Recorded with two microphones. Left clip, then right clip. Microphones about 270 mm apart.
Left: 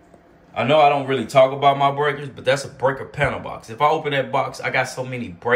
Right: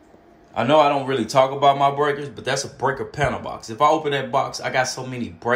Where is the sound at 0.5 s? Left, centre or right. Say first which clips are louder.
Left 1 dB; centre.